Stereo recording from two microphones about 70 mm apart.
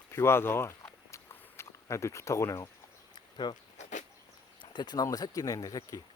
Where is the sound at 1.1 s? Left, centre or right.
Left.